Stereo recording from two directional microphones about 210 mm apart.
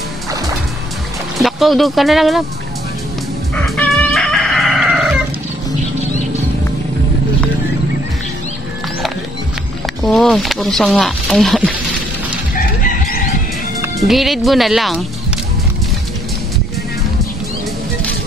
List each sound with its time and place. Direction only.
1.4 s speech: centre (ahead or behind)
3.5 s chicken: 5° left (ahead or behind)
10.0 s speech: 5° left (ahead or behind)
12.5 s chicken: 45° left (ahead or behind)
13.9 s speech: centre (ahead or behind)